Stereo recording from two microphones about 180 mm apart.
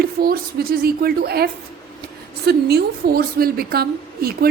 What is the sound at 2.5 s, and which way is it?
A woman's voice, 65° right (ahead or behind).